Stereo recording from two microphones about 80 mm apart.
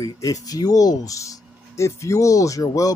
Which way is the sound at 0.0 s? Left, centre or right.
Left.